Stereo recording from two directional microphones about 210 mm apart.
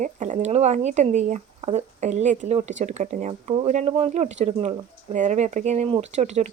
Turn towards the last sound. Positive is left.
turn(degrees=-30)  # may be behind; listen again after turning